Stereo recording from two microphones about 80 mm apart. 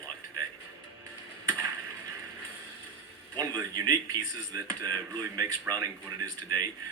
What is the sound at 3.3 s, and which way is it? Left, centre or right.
A man's voice, right.